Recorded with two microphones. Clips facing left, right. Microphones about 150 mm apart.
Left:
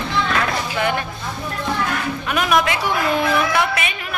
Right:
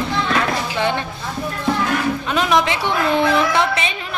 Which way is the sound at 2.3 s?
25° right (ahead or behind).